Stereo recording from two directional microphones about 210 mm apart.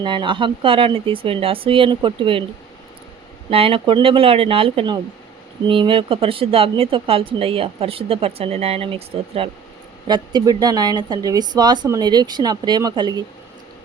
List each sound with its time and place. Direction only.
0.0 s speech: 20° right (ahead or behind)
3.5 s speech: 25° right (ahead or behind)